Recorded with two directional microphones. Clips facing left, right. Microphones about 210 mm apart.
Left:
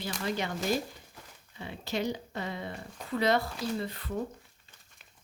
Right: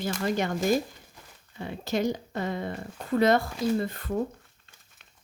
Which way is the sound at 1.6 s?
45° right (ahead or behind).